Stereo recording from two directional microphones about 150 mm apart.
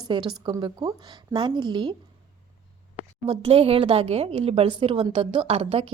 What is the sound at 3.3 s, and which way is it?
Speech, 40° right (ahead or behind).